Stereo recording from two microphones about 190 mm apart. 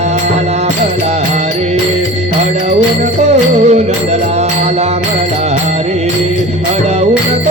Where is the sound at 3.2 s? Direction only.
35° right (ahead or behind).